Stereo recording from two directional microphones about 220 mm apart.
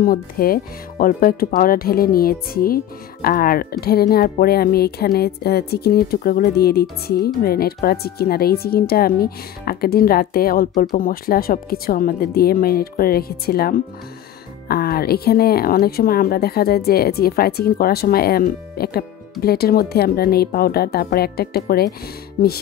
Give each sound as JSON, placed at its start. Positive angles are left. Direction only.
{"t": 0.0, "sound": "speech", "side_deg": 40}